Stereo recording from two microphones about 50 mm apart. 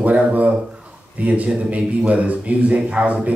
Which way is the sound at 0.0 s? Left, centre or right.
Right.